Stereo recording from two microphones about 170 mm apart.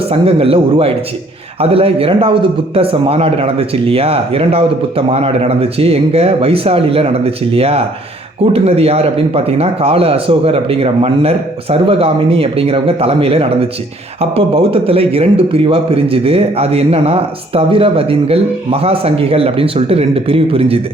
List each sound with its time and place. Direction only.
0.1 s a man's voice: 35° right (ahead or behind)